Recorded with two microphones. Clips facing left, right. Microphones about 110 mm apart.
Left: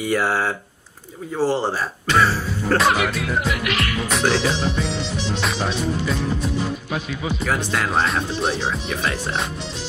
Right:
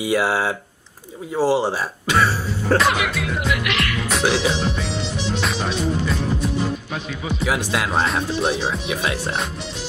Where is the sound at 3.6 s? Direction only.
40° left (ahead or behind).